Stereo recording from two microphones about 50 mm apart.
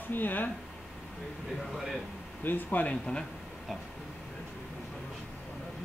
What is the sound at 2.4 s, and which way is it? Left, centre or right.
Speech, left.